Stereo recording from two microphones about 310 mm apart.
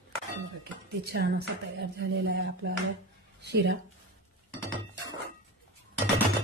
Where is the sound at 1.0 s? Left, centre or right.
Right.